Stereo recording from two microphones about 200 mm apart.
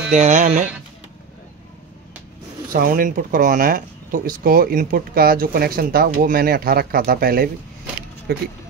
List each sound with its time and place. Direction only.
0.1 s speech: 35° right (ahead or behind)
2.7 s speech: 45° right (ahead or behind)